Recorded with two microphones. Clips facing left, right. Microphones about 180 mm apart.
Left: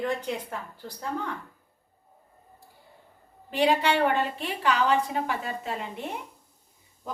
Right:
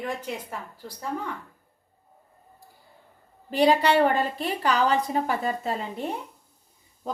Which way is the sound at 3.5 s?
40° right (ahead or behind).